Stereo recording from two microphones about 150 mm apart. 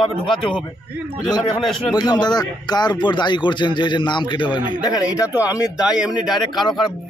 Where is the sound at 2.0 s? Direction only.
30° left (ahead or behind).